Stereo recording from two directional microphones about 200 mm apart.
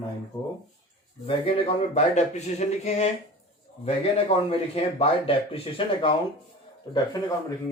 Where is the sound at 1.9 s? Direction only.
35° left (ahead or behind).